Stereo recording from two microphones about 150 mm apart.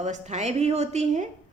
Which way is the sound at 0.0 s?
50° right (ahead or behind).